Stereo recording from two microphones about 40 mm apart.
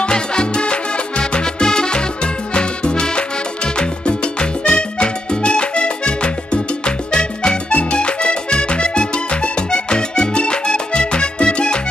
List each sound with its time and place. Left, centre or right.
0.0 s music: left
2.5 s salsa music: left
7.1 s music: left